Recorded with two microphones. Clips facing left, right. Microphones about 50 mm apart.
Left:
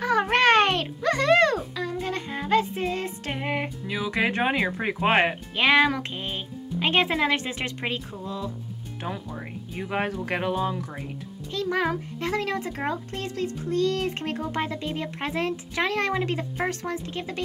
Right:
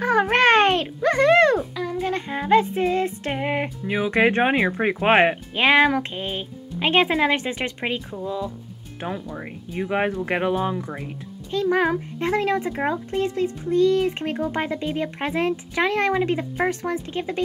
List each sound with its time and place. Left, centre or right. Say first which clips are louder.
0.3 s a sound: right 2 dB; right
1.6 s a sound: right 4 dB; centre
2.7 s music: right 7 dB; right
3.8 s speech: right 8 dB; right
7.8 s speech: right 4 dB; centre
10.2 s speech: right 4 dB; right